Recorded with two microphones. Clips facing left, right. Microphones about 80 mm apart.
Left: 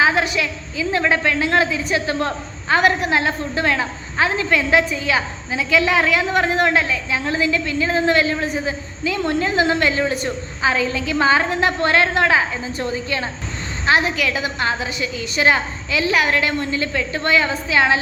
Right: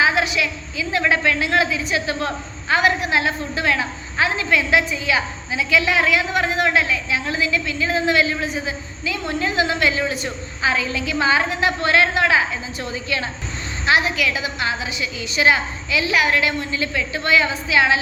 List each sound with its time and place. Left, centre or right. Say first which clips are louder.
0.0 s a woman's voice: left 1 dB; left